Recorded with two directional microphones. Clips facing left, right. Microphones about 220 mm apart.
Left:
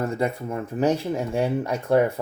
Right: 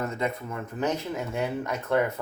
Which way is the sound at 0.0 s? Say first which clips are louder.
Left 5 dB; 30° left (ahead or behind).